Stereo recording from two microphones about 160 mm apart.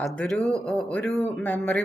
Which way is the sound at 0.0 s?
5° left (ahead or behind).